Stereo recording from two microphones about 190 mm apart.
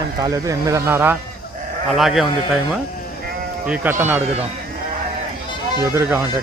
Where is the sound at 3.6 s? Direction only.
10° right (ahead or behind).